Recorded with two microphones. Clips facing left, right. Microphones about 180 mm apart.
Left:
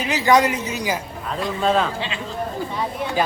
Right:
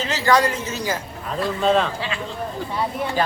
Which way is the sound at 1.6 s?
Centre (ahead or behind).